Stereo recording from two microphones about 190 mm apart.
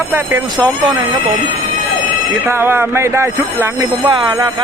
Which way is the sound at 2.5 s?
10° right (ahead or behind).